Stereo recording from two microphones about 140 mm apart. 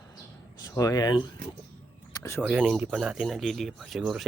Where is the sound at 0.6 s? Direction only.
25° left (ahead or behind).